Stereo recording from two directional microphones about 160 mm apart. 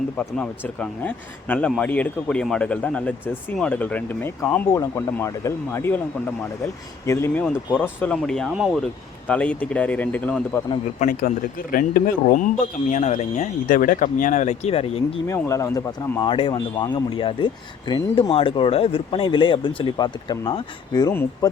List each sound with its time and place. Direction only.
0.2 s speech: 5° left (ahead or behind)
7.0 s speech: 15° left (ahead or behind); by 8.8 s centre (ahead or behind)
9.2 s speech: 10° left (ahead or behind)
11.0 s speech: 55° left (ahead or behind)
12.9 s speech: 45° left (ahead or behind)
15.3 s speech: 20° left (ahead or behind)
21.1 s speech: 15° left (ahead or behind)